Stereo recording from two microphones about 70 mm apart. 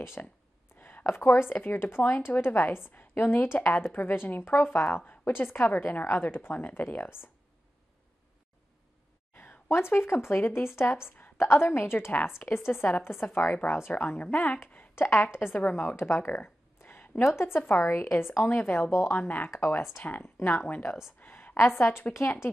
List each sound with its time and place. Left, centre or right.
0.0 s a woman's voice: left
9.3 s a woman's voice: left
11.1 s a sound: left
11.3 s a woman's voice: left
16.8 s a sound: left
17.4 s a woman's voice: left
19.5 s speech: left
20.0 s a woman's voice: left
21.2 s a sound: left